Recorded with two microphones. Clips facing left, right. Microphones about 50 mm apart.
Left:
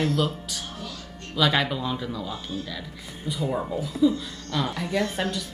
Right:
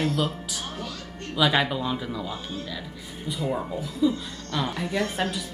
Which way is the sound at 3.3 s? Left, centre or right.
Centre.